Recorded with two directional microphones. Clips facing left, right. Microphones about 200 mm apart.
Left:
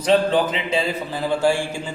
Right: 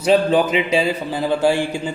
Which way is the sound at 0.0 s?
10° right (ahead or behind).